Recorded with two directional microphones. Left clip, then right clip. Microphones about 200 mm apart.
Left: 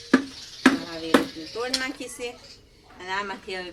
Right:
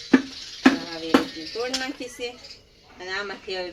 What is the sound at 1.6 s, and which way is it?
Speech, 15° left (ahead or behind).